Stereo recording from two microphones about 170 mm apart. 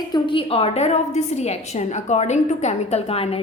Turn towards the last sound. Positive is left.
turn(degrees=35)  # may be behind; listen again after turning